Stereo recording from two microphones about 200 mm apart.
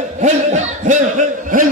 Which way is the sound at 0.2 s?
35° right (ahead or behind).